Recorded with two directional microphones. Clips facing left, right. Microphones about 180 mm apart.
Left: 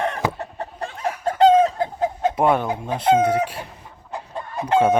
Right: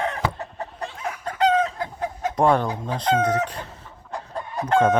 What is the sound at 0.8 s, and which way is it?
Chicken, 50° left (ahead or behind).